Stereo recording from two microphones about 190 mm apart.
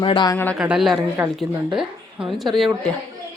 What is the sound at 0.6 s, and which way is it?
A woman's voice, 5° right (ahead or behind).